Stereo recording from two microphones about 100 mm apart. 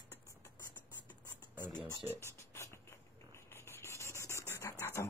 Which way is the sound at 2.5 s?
25° left (ahead or behind).